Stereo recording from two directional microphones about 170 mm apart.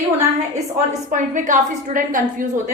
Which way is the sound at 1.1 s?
50° right (ahead or behind).